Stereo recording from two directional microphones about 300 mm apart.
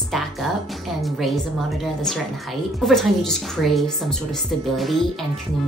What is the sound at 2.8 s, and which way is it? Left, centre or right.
A woman's voice, centre.